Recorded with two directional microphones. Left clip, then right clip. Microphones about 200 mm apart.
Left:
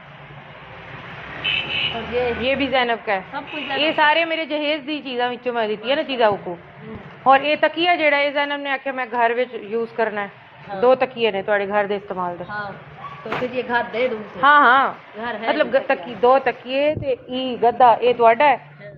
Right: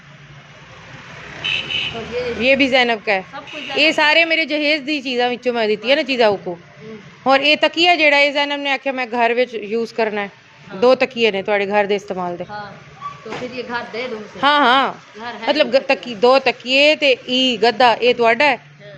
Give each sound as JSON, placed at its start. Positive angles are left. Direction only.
{"t": 2.4, "sound": "a man's voice", "side_deg": -70}
{"t": 13.5, "sound": "speech", "side_deg": -25}
{"t": 14.4, "sound": "a man's voice", "side_deg": -70}
{"t": 15.2, "sound": "speech", "side_deg": -30}
{"t": 15.4, "sound": "a man's voice", "side_deg": -70}